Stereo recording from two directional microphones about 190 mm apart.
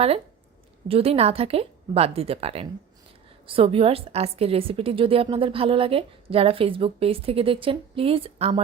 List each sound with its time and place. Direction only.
0.9 s a woman's voice: 30° right (ahead or behind)